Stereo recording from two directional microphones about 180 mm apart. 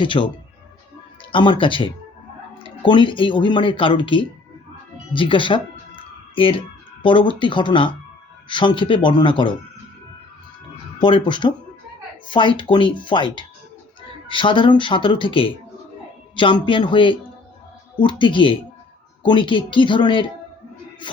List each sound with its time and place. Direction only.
0.0 s speech: 30° left (ahead or behind)
11.0 s speech: 25° left (ahead or behind)